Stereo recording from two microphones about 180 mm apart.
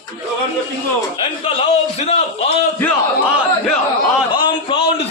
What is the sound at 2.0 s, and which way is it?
Speech, 35° left (ahead or behind).